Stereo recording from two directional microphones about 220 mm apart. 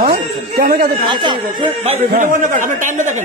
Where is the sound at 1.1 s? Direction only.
20° right (ahead or behind).